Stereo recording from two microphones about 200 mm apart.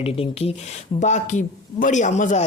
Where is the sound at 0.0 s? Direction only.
30° left (ahead or behind).